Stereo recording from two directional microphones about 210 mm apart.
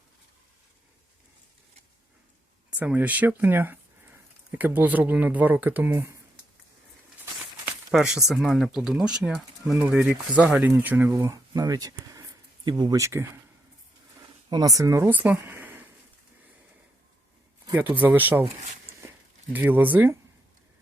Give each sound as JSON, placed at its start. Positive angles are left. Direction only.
{"t": 2.6, "sound": "speech", "side_deg": -5}
{"t": 7.9, "sound": "speech", "side_deg": -5}
{"t": 14.5, "sound": "speech", "side_deg": -15}
{"t": 17.9, "sound": "speech", "side_deg": -10}
{"t": 19.5, "sound": "speech", "side_deg": -10}